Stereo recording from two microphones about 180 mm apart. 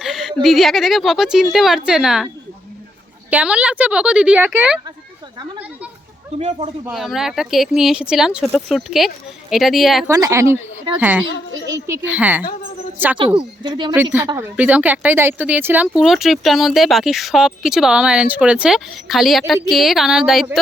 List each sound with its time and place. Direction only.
0.0 s a sound: centre (ahead or behind)
0.4 s a woman's voice: centre (ahead or behind)
6.9 s speech: centre (ahead or behind)
10.1 s a woman's voice: 20° right (ahead or behind)
13.1 s speech: 25° right (ahead or behind)
13.9 s a woman's voice: 10° right (ahead or behind)